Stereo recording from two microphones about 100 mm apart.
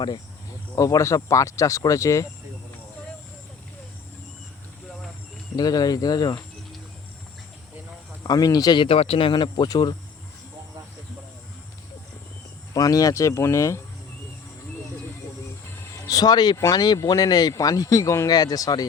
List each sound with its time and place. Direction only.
0.8 s speech: 35° left (ahead or behind)
5.5 s speech: 40° left (ahead or behind)
8.2 s speech: 40° left (ahead or behind)
8.9 s speech: 70° left (ahead or behind); by 9.9 s 45° left (ahead or behind)
12.7 s speech: 35° left (ahead or behind)
16.0 s speech: 40° left (ahead or behind)